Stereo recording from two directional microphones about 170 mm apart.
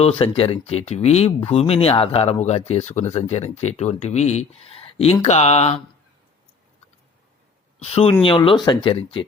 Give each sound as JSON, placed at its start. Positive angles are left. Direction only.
{"t": 0.0, "sound": "speech", "side_deg": 35}
{"t": 7.8, "sound": "speech", "side_deg": 35}